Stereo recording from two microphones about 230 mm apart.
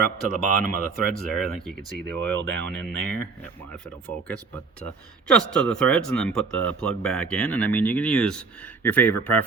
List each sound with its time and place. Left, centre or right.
0.0 s speech: right
1.5 s speech: centre
2.3 s speech: right
2.8 s speech: centre
5.3 s speech: centre